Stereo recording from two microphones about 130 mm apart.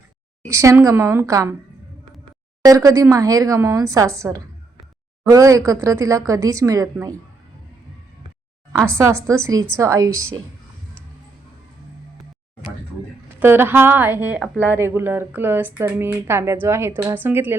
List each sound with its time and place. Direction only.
0.4 s speech: 25° right (ahead or behind)
2.6 s speech: 25° right (ahead or behind)
9.0 s speech: 25° right (ahead or behind)
13.4 s speech: 15° right (ahead or behind)